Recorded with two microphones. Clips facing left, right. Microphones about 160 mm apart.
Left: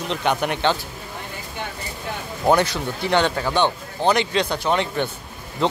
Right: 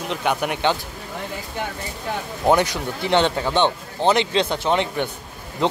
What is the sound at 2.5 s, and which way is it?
Speech, 15° right (ahead or behind).